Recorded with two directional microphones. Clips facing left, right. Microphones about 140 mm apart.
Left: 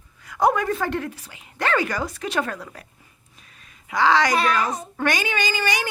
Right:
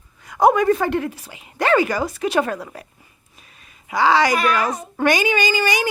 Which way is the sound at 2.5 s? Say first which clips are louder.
Right 5 dB; 30° right (ahead or behind).